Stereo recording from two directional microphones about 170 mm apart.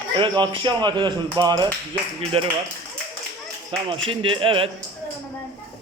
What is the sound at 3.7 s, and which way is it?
A man's voice, 30° right (ahead or behind).